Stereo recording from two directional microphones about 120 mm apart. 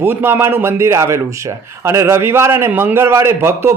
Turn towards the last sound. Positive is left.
turn(degrees=-20)  # may be behind; listen again after turning